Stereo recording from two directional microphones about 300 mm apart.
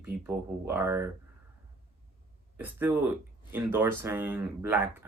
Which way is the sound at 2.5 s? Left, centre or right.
Centre.